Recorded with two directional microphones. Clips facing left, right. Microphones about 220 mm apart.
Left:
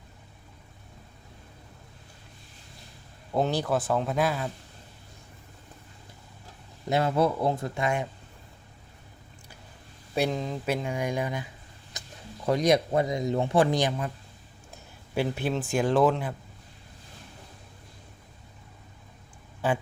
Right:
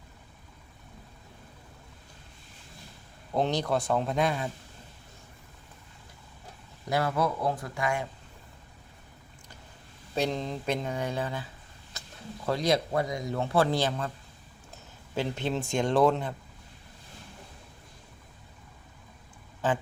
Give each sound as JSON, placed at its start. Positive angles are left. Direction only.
{"t": 3.3, "sound": "a man's voice", "side_deg": 5}
{"t": 6.9, "sound": "speech", "side_deg": 25}
{"t": 10.2, "sound": "a man's voice", "side_deg": 5}
{"t": 11.9, "sound": "a sound", "side_deg": 15}
{"t": 12.5, "sound": "a man's voice", "side_deg": 20}
{"t": 15.1, "sound": "a man's voice", "side_deg": 10}